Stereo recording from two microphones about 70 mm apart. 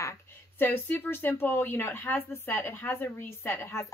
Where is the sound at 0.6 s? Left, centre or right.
Left.